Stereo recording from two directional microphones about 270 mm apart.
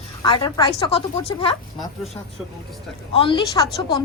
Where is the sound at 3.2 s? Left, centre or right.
Centre.